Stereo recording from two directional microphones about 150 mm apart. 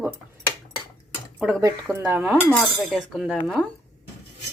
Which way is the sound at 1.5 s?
20° right (ahead or behind).